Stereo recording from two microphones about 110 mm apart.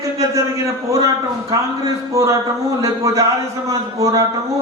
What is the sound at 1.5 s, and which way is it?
A man's voice, 30° right (ahead or behind).